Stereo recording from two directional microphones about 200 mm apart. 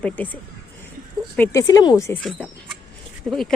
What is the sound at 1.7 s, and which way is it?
Speech, 20° left (ahead or behind).